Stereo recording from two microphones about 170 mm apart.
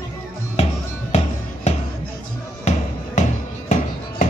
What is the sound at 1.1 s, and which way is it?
Music, 40° left (ahead or behind).